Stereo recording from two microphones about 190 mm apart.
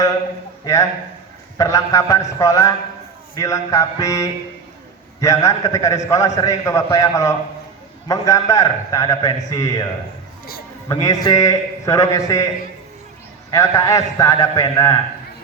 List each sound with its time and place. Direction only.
0.6 s a man's voice: 15° left (ahead or behind)
10.8 s a man's voice: 20° left (ahead or behind)
13.5 s a man's voice: 15° left (ahead or behind)